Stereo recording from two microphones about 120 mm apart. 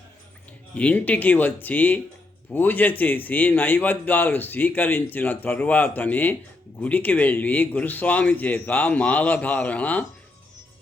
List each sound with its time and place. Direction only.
0.8 s speech: 10° left (ahead or behind)